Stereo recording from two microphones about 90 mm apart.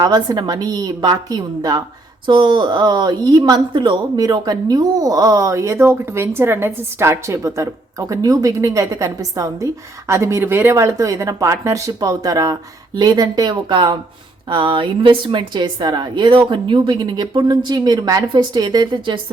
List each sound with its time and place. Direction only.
0.0 s a woman's voice: 50° right (ahead or behind)
2.2 s a woman's voice: 65° right (ahead or behind)
3.7 s a woman's voice: 65° right (ahead or behind)
4.2 s a woman's voice: 45° right (ahead or behind)
14.5 s a woman's voice: 70° right (ahead or behind)